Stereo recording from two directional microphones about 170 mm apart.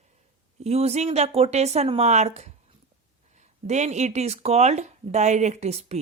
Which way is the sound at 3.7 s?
40° right (ahead or behind).